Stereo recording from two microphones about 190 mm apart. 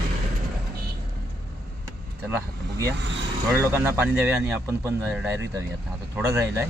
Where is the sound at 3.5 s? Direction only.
10° right (ahead or behind).